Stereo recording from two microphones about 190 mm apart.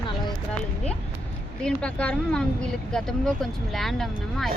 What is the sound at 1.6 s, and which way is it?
Speech, 5° left (ahead or behind).